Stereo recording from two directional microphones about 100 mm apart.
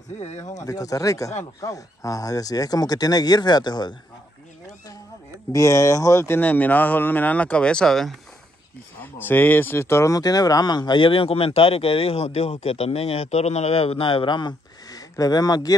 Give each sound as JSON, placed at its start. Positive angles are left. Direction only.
{"t": 0.4, "sound": "speech", "side_deg": 35}
{"t": 5.5, "sound": "speech", "side_deg": 30}
{"t": 9.0, "sound": "speech", "side_deg": 20}